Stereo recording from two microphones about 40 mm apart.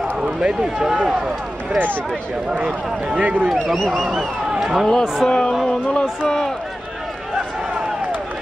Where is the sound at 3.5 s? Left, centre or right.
Centre.